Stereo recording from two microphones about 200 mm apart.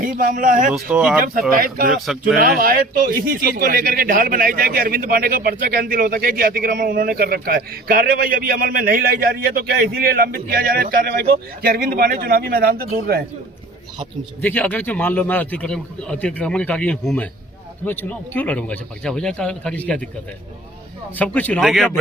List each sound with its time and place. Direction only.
0.0 s speech: 45° right (ahead or behind)
0.7 s speech: 5° right (ahead or behind)
1.2 s speech: 45° right (ahead or behind)
14.4 s a man's voice: 10° left (ahead or behind)
21.2 s a man's voice: 10° left (ahead or behind)